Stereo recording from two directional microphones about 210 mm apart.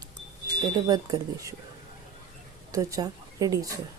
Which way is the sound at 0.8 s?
15° right (ahead or behind).